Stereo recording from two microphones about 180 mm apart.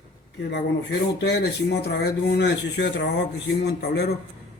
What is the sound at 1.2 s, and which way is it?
Speech, 70° left (ahead or behind).